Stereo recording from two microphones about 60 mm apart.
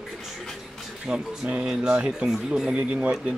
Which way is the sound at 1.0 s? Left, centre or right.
Centre.